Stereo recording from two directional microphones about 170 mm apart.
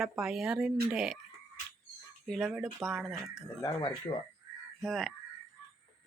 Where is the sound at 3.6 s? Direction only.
20° left (ahead or behind).